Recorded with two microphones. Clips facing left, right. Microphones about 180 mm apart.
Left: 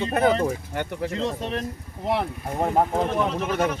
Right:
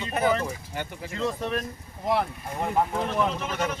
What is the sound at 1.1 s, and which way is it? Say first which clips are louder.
Speech: right 2 dB; 25° left (ahead or behind).